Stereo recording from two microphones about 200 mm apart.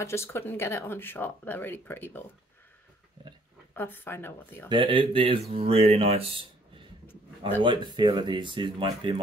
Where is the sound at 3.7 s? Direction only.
10° left (ahead or behind).